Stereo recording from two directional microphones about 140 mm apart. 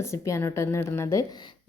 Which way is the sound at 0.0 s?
20° left (ahead or behind).